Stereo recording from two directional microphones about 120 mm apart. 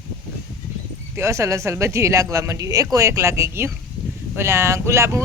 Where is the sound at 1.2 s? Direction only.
25° right (ahead or behind).